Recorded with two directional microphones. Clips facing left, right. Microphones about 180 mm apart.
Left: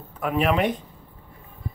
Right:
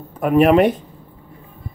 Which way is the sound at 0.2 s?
50° right (ahead or behind).